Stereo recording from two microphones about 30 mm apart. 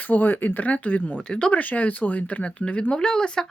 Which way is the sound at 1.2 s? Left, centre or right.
Left.